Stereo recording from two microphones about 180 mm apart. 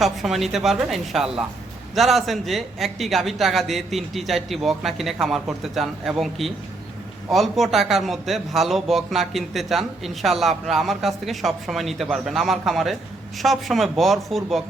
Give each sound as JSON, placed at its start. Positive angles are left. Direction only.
{"t": 0.0, "sound": "a man's voice", "side_deg": 0}